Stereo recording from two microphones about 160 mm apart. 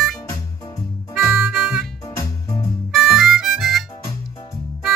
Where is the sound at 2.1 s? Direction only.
15° left (ahead or behind).